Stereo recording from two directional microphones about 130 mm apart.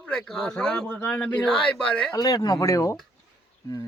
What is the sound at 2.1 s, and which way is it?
Speech, 30° left (ahead or behind).